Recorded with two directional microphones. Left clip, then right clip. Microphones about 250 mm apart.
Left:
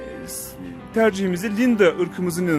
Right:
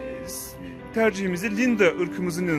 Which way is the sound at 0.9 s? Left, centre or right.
Centre.